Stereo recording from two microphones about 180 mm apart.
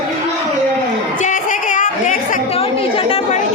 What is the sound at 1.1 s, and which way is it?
Chatter, 45° left (ahead or behind).